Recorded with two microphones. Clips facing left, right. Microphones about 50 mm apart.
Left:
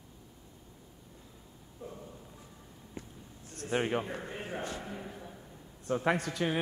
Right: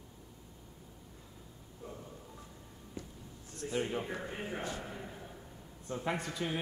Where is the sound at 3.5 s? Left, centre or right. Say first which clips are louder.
Left 4 dB; left.